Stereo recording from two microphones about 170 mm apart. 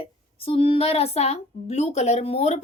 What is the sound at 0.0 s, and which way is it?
A woman's voice, 35° left (ahead or behind).